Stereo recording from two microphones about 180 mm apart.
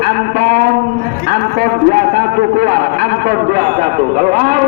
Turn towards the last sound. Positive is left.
turn(degrees=-45)  # may be behind; listen again after turning